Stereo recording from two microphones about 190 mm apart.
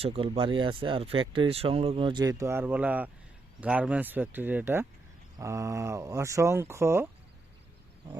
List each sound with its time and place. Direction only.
0.0 s speech: 30° right (ahead or behind); by 7.1 s 15° right (ahead or behind)